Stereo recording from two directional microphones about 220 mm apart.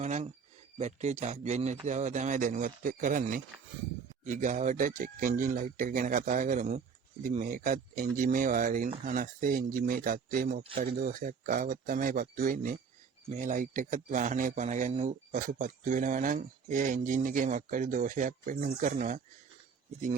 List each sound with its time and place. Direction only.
0.0 s speech: 30° right (ahead or behind)